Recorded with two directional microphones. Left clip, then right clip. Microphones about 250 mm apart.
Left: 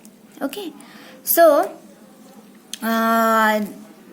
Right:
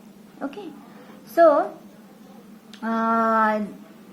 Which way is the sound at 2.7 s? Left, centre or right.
Left.